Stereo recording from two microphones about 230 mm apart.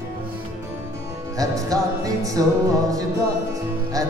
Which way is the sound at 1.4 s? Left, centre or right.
Centre.